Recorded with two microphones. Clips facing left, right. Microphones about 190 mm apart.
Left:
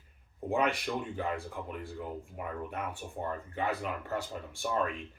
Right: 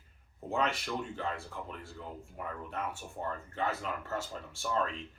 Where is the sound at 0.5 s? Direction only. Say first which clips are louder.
Left 3 dB; 15° left (ahead or behind).